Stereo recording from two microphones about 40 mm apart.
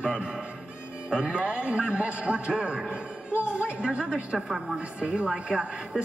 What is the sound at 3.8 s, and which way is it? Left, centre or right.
Speech, right.